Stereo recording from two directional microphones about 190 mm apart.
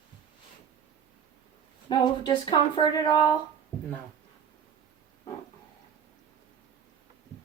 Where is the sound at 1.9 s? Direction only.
25° left (ahead or behind).